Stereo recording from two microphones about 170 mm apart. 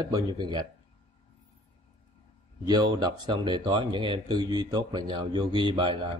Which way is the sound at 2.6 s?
25° right (ahead or behind).